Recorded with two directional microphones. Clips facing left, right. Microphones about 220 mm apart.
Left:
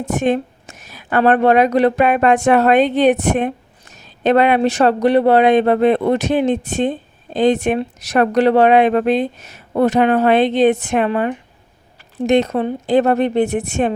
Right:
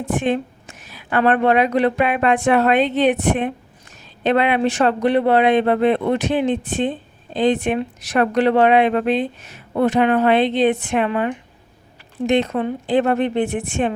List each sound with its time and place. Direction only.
0.0 s speech: 45° left (ahead or behind)